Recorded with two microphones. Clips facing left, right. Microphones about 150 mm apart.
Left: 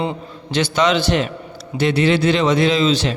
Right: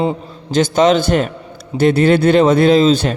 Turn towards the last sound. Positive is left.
turn(degrees=-50)  # may be behind; listen again after turning